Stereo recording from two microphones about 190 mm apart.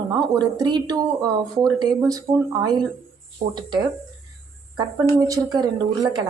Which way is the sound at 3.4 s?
40° right (ahead or behind).